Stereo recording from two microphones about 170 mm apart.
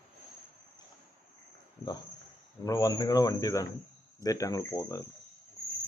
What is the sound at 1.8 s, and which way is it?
Speech, 20° left (ahead or behind).